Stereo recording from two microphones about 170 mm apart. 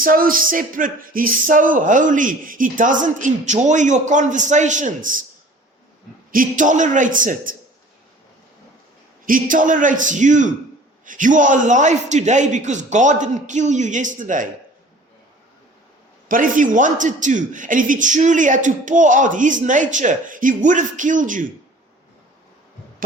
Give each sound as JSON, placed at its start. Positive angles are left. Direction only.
{"t": 0.0, "sound": "speech", "side_deg": -55}
{"t": 6.3, "sound": "speech", "side_deg": -50}
{"t": 9.2, "sound": "speech", "side_deg": -50}
{"t": 16.3, "sound": "speech", "side_deg": -50}